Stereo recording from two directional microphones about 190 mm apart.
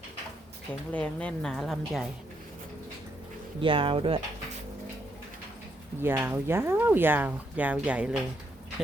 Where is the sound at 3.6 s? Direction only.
25° right (ahead or behind).